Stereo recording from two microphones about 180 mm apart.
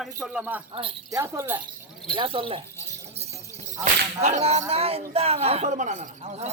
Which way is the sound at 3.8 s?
40° right (ahead or behind).